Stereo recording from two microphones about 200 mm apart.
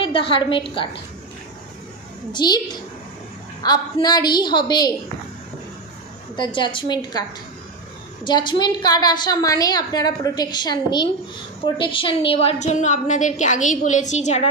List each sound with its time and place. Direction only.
0.0 s a woman's voice: 25° left (ahead or behind)
2.3 s a woman's voice: 20° left (ahead or behind)
6.3 s a woman's voice: 25° left (ahead or behind)